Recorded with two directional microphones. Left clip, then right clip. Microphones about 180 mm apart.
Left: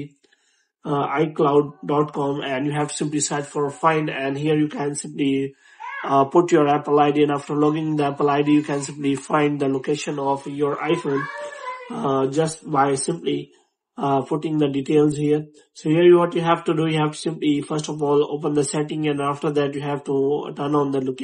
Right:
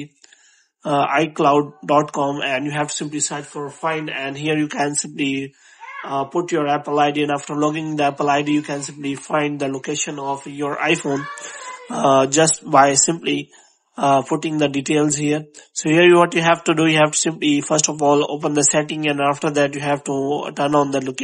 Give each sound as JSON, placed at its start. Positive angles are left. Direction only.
{"t": 0.8, "sound": "speech", "side_deg": -40}
{"t": 2.4, "sound": "speech", "side_deg": -25}
{"t": 3.5, "sound": "speech", "side_deg": 0}
{"t": 4.0, "sound": "speech", "side_deg": -15}
{"t": 4.5, "sound": "speech", "side_deg": -35}
{"t": 5.2, "sound": "speech", "side_deg": -20}
{"t": 6.0, "sound": "speech", "side_deg": 0}
{"t": 6.9, "sound": "speech", "side_deg": -15}
{"t": 8.5, "sound": "speech", "side_deg": -15}
{"t": 11.9, "sound": "speech", "side_deg": -40}